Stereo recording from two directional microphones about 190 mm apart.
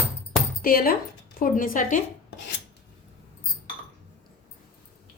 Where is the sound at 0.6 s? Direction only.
50° left (ahead or behind).